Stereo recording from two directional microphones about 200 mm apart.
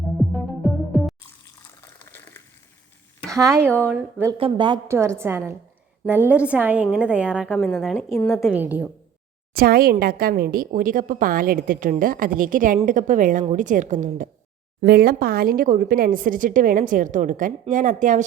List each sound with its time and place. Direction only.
0.2 s music: centre (ahead or behind)
1.8 s water: 10° left (ahead or behind)
3.2 s a woman's voice: 15° right (ahead or behind)
4.4 s a woman's voice: 25° right (ahead or behind); by 8.5 s 5° left (ahead or behind)
8.5 s a woman's voice: 5° right (ahead or behind)
9.6 s a woman's voice: 45° right (ahead or behind)
14.8 s a woman's voice: 50° right (ahead or behind)